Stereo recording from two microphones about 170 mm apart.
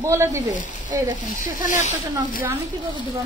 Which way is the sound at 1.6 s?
50° left (ahead or behind).